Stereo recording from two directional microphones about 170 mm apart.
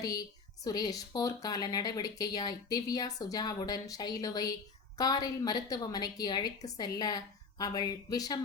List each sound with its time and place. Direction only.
0.0 s a woman's voice: 20° left (ahead or behind)